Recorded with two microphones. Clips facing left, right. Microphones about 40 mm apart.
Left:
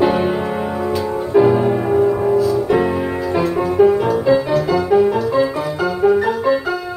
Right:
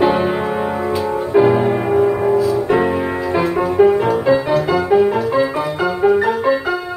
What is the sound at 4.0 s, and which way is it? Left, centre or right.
Music, right.